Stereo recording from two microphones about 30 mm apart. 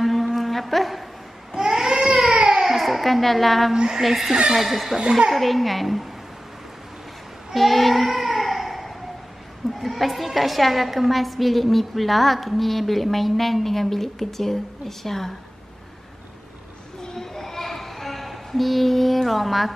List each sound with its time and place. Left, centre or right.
0.0 s a sound: centre
1.5 s babbling: centre
2.2 s a sound: right
2.7 s a woman's voice: centre
3.7 s a woman's voice: right
4.0 s a woman's voice: centre
7.5 s child singing: centre
9.8 s a woman's voice: centre
17.2 s a sound: centre
19.2 s a woman's voice: centre